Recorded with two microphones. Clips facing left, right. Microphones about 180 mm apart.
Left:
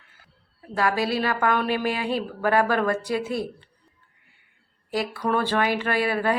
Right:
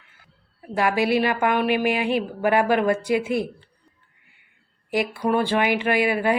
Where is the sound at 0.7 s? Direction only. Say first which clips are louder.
Right 3 dB; 20° right (ahead or behind).